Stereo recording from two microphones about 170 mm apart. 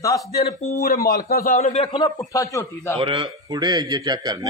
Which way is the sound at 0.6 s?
60° left (ahead or behind).